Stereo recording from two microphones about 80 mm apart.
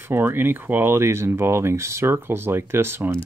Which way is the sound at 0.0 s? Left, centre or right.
Right.